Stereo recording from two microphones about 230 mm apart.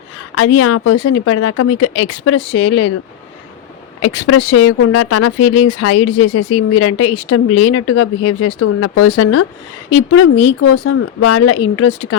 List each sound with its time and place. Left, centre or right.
0.3 s speech: left
4.0 s speech: left